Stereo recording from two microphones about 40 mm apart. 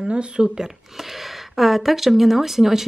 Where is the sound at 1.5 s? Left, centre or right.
Centre.